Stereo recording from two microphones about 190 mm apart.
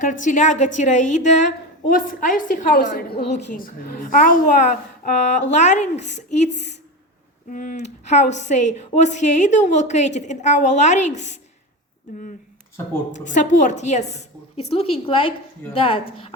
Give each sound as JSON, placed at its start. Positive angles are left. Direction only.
{"t": 0.0, "sound": "a woman's voice", "side_deg": 40}
{"t": 7.5, "sound": "speech", "side_deg": 45}
{"t": 13.1, "sound": "speech", "side_deg": 40}